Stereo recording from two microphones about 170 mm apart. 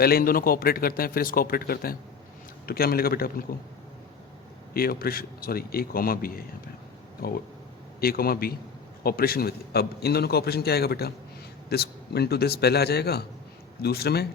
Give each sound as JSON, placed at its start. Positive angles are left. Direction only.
{"t": 0.0, "sound": "a man's voice", "side_deg": 60}
{"t": 4.7, "sound": "a man's voice", "side_deg": 60}